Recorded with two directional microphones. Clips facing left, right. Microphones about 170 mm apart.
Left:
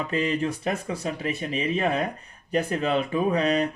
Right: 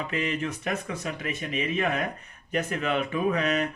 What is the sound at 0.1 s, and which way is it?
Speech, 35° left (ahead or behind).